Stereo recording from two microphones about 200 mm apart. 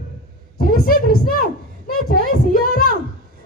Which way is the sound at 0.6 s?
45° left (ahead or behind).